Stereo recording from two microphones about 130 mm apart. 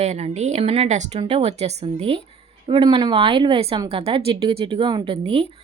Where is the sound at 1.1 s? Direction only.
50° right (ahead or behind).